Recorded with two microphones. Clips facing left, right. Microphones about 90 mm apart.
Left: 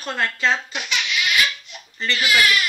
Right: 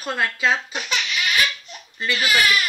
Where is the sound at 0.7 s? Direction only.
35° right (ahead or behind).